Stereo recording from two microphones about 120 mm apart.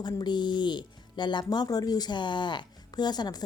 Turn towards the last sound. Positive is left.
turn(degrees=35)  # may be behind; listen again after turning